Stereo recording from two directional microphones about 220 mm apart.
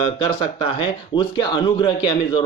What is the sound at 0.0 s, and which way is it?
Speech, 25° left (ahead or behind).